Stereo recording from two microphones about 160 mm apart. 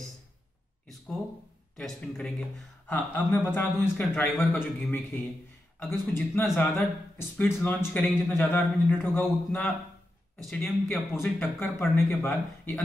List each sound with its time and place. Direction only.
1.8 s a man's voice: 5° left (ahead or behind)